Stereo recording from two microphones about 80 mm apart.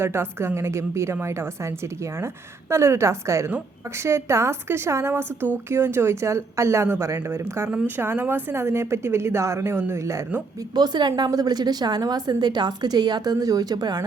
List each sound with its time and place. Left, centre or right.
0.0 s a woman's voice: right
10.8 s a woman's voice: right